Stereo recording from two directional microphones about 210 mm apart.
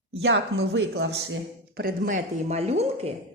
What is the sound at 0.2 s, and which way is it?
A woman's voice, 55° right (ahead or behind).